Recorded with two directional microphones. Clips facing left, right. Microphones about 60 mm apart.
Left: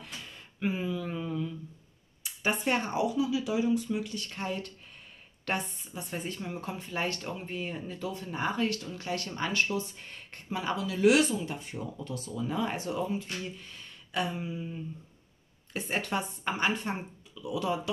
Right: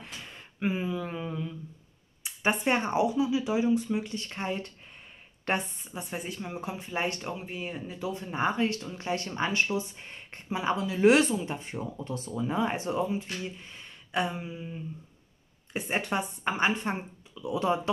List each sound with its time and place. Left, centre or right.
0.0 s a sound: right
2.2 s speech: right
6.1 s speech: centre
7.4 s speech: centre
8.1 s speech: right